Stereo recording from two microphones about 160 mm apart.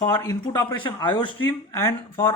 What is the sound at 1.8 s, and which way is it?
Speech, 15° left (ahead or behind).